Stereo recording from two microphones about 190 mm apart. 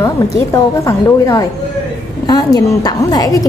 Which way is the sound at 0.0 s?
15° left (ahead or behind).